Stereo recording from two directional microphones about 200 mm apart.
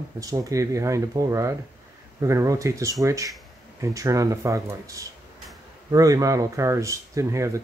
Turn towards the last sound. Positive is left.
turn(degrees=-15)  # may be behind; listen again after turning